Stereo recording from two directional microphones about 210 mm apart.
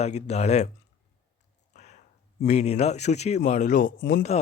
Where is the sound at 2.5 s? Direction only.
30° left (ahead or behind).